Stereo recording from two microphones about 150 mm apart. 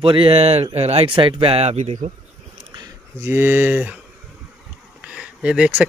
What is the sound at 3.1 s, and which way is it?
Speech, 15° right (ahead or behind).